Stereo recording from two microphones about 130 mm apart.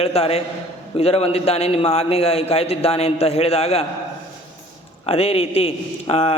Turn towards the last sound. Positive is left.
turn(degrees=50)  # may be behind; listen again after turning